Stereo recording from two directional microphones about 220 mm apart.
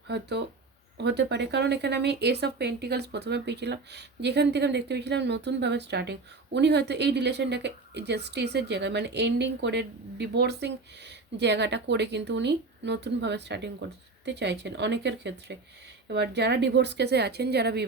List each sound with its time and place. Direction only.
0.1 s speech: 50° right (ahead or behind)